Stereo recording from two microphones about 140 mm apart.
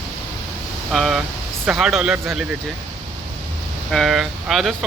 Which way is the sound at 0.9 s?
Centre (ahead or behind).